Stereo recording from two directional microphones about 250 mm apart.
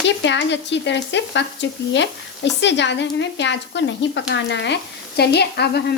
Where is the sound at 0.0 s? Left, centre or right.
Left.